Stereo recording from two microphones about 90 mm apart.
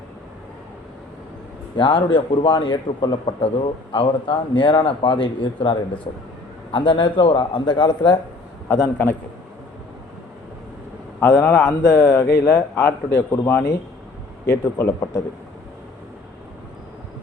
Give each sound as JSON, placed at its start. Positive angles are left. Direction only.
{"t": 1.7, "sound": "a man's voice", "side_deg": 70}
{"t": 3.4, "sound": "a man's voice", "side_deg": 90}
{"t": 8.7, "sound": "a man's voice", "side_deg": 30}
{"t": 11.2, "sound": "a man's voice", "side_deg": 25}
{"t": 14.8, "sound": "a man's voice", "side_deg": 30}